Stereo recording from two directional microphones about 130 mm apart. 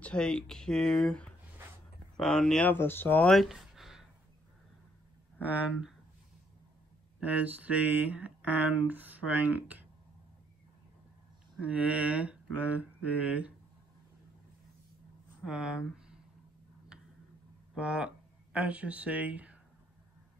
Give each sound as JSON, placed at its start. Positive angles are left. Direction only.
{"t": 0.0, "sound": "speech", "side_deg": 5}
{"t": 2.7, "sound": "speech", "side_deg": 15}
{"t": 3.3, "sound": "a sound", "side_deg": 0}
{"t": 5.4, "sound": "speech", "side_deg": -10}
{"t": 7.2, "sound": "speech", "side_deg": -10}
{"t": 11.5, "sound": "speech", "side_deg": -10}
{"t": 15.4, "sound": "speech", "side_deg": -5}
{"t": 17.7, "sound": "speech", "side_deg": -10}